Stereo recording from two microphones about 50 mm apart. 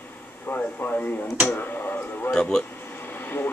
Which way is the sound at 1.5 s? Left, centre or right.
Left.